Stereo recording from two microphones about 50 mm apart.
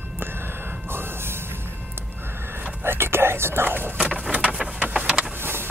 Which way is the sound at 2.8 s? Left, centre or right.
Right.